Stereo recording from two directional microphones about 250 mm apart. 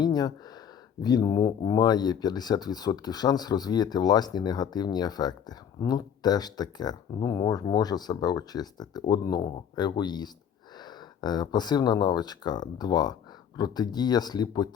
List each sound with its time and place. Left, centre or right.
0.0 s speech: centre